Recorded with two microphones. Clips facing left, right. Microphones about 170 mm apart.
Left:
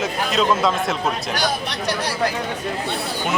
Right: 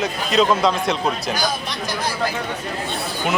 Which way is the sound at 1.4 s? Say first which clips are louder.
Left 1 dB; 65° left (ahead or behind).